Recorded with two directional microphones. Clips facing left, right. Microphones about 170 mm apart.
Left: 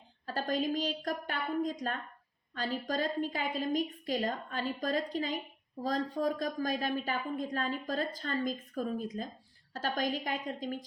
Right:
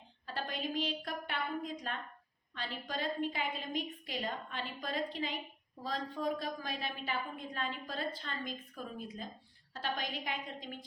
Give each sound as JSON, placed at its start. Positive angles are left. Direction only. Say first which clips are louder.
{"t": 0.3, "sound": "a woman's voice", "louder": "left 7 dB", "side_deg": 40}